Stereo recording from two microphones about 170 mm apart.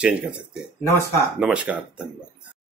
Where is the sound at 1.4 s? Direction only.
10° right (ahead or behind).